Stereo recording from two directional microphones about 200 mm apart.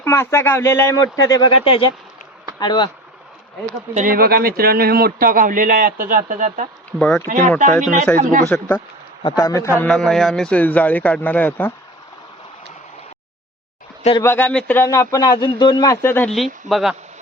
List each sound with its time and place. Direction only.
0.0 s speech: 10° left (ahead or behind)
3.9 s a man's voice: 45° right (ahead or behind)
7.0 s speech: 5° left (ahead or behind)
7.3 s a man's voice: 40° right (ahead or behind)
8.4 s speech: 5° left (ahead or behind)
9.7 s speech: 5° left (ahead or behind)
14.2 s speech: 10° left (ahead or behind)